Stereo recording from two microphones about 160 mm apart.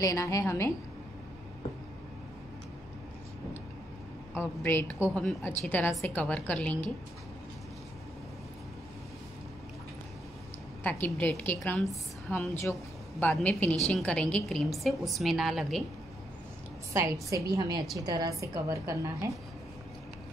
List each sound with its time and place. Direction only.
0.0 s a woman's voice: 20° left (ahead or behind)
4.3 s a woman's voice: 15° left (ahead or behind)
10.8 s a woman's voice: 10° left (ahead or behind)
16.9 s a woman's voice: 20° right (ahead or behind)